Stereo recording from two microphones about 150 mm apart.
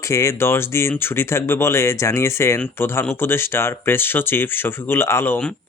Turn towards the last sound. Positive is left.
turn(degrees=10)  # may be behind; listen again after turning